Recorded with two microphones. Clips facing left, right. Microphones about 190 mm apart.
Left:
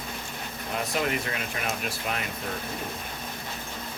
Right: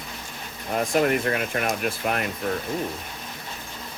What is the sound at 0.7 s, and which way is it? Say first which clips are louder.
Speech: right 7 dB; 50° right (ahead or behind).